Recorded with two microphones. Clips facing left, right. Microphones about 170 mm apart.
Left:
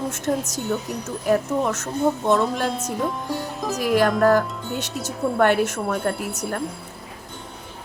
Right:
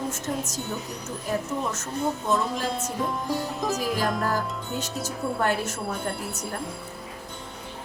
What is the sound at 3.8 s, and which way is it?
Speech, 70° left (ahead or behind).